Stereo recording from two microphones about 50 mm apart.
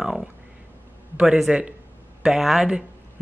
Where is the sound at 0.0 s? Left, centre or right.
Centre.